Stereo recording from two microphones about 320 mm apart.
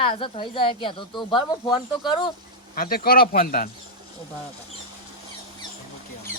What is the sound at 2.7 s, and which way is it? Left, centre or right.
Speech, left.